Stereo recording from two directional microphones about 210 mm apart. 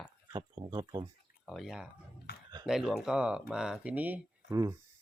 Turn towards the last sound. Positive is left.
turn(degrees=-15)  # may be behind; listen again after turning